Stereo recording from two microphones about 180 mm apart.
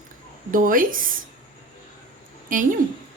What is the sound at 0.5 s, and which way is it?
Speech, 50° right (ahead or behind).